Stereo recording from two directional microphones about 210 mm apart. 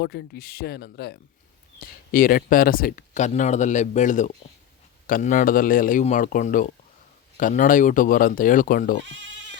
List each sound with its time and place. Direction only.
0.0 s speech: 55° left (ahead or behind)